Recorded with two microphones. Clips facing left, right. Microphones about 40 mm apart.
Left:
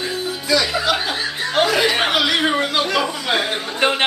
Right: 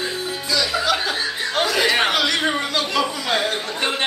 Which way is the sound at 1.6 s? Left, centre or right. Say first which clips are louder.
Left 2 dB; centre.